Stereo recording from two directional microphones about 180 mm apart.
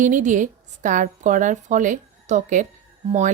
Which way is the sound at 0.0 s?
45° right (ahead or behind).